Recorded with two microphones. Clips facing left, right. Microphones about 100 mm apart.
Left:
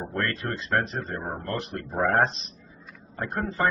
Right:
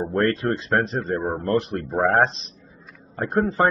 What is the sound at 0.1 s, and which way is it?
A man's voice, 35° right (ahead or behind).